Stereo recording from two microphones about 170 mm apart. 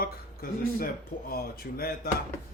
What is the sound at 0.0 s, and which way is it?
Speech, 60° left (ahead or behind).